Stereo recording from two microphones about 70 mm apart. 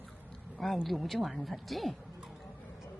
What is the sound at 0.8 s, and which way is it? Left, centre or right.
A woman's voice, centre.